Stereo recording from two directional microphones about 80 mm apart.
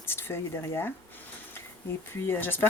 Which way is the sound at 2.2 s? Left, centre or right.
Left.